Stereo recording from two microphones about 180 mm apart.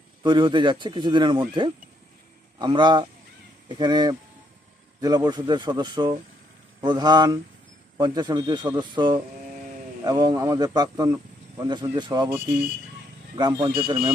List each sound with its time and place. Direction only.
0.2 s a man's voice: 25° right (ahead or behind)
13.3 s a man's voice: 20° right (ahead or behind)